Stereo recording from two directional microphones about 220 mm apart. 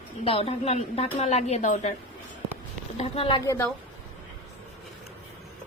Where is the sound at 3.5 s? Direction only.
10° left (ahead or behind).